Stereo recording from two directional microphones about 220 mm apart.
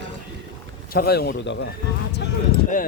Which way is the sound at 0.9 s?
45° left (ahead or behind).